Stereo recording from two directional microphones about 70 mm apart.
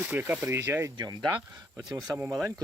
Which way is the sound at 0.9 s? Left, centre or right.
Right.